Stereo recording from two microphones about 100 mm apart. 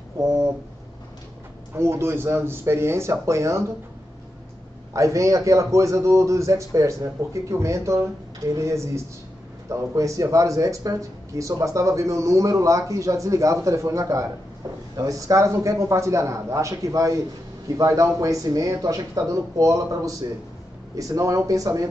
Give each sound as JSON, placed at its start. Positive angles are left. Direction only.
{"t": 1.7, "sound": "speech", "side_deg": -25}
{"t": 4.9, "sound": "speech", "side_deg": -30}